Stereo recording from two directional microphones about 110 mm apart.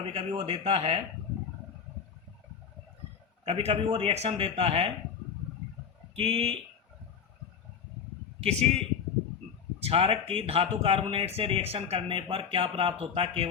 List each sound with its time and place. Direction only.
0.1 s speech: 70° right (ahead or behind)
3.4 s speech: 65° right (ahead or behind)
6.1 s speech: 65° right (ahead or behind)
8.4 s a man's voice: 70° right (ahead or behind)
9.8 s speech: 60° right (ahead or behind)